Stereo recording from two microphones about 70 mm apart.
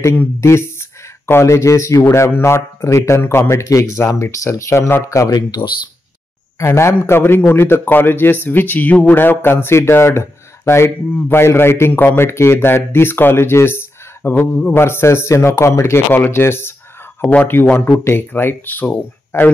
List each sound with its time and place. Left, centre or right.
0.4 s a man's voice: left
6.6 s a man's voice: left
15.8 s a man's voice: left
17.2 s a man's voice: left